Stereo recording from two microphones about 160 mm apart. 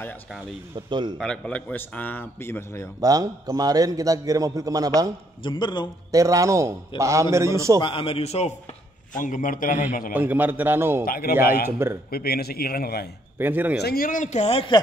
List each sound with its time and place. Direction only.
0.8 s a man's voice: 30° right (ahead or behind)
1.1 s a man's voice: 5° left (ahead or behind)
3.0 s a man's voice: 25° right (ahead or behind)
5.4 s a man's voice: 30° left (ahead or behind)
6.1 s a man's voice: 20° right (ahead or behind)
7.8 s a man's voice: 35° left (ahead or behind)
9.1 s a man's voice: 55° left (ahead or behind)
10.1 s a man's voice: 10° right (ahead or behind)
11.1 s a man's voice: 65° left (ahead or behind)
13.4 s a man's voice: 10° right (ahead or behind)
13.7 s speech: 80° left; by 14.8 s 35° left (ahead or behind)